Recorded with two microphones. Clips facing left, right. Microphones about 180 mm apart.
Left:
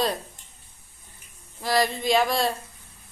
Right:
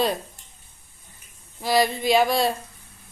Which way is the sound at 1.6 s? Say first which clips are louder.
Right 2 dB; centre (ahead or behind).